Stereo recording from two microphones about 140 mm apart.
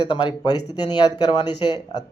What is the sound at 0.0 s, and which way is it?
Speech, 35° left (ahead or behind).